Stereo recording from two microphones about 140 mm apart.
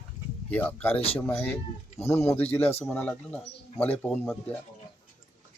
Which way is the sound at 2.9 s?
10° left (ahead or behind).